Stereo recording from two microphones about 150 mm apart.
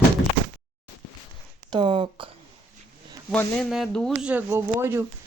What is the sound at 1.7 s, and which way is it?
Speech, 30° right (ahead or behind).